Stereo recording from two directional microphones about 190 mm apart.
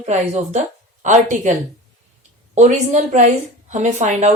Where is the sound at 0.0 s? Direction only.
35° right (ahead or behind).